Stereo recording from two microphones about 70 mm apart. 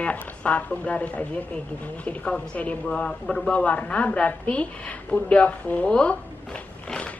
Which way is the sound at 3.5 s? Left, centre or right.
Centre.